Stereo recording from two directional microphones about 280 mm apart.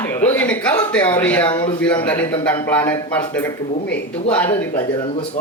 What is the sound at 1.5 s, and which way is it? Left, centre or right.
Speech, centre.